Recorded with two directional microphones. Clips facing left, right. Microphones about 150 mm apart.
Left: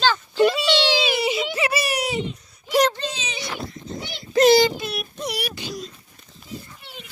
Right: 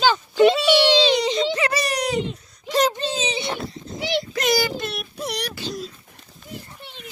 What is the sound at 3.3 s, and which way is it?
Dog, 25° right (ahead or behind).